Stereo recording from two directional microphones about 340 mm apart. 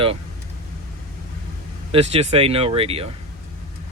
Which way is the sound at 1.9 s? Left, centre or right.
Centre.